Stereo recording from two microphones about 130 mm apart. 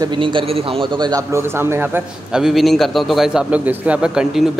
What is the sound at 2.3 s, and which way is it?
A man's voice, 5° right (ahead or behind).